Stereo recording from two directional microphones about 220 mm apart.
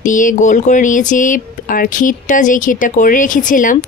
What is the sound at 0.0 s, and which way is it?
Speech, 35° left (ahead or behind).